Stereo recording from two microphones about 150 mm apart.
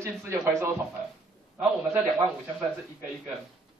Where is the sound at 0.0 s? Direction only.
20° right (ahead or behind).